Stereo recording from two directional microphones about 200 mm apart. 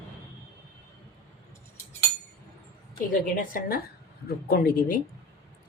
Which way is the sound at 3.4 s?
45° left (ahead or behind).